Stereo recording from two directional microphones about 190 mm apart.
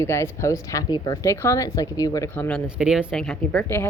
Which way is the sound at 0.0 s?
15° left (ahead or behind).